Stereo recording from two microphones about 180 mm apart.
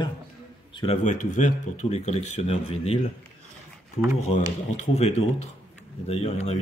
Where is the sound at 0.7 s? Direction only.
40° left (ahead or behind).